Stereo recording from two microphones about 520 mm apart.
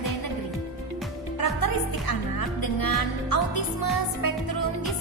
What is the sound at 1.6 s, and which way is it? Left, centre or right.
Music, left.